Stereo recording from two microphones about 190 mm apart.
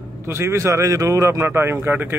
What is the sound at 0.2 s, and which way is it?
A man's voice, 15° right (ahead or behind).